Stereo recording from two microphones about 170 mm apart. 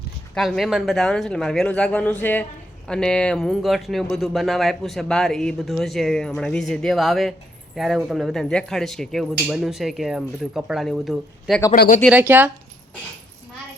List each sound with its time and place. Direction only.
0.3 s speech: centre (ahead or behind)
11.7 s speech: 55° left (ahead or behind)
12.1 s speech: 10° right (ahead or behind)